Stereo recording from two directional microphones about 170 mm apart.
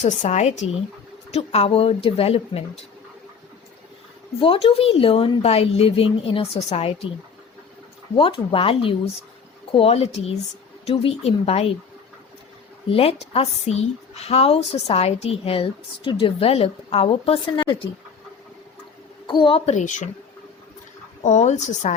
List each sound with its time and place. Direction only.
0.0 s a woman's voice: 45° left (ahead or behind)
4.4 s a woman's voice: 30° left (ahead or behind)
8.1 s a woman's voice: 30° left (ahead or behind)
12.9 s a woman's voice: 35° left (ahead or behind)
19.3 s a woman's voice: 30° left (ahead or behind); by 20.1 s 45° left (ahead or behind)
21.2 s speech: 45° left (ahead or behind)